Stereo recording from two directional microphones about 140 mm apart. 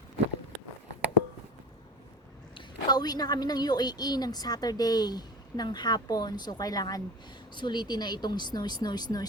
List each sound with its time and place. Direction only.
2.6 s a woman's voice: 30° left (ahead or behind)